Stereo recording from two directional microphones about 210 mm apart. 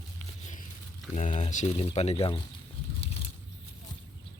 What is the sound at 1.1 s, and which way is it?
Speech, 35° left (ahead or behind).